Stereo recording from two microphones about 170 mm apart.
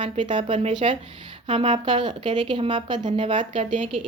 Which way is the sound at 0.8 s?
40° right (ahead or behind).